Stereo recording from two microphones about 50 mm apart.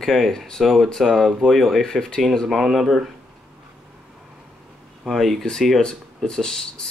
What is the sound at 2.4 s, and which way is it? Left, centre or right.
Speech, centre.